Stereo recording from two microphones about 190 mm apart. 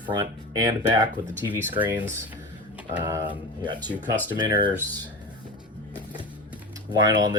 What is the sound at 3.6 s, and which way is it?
Speech, 25° right (ahead or behind).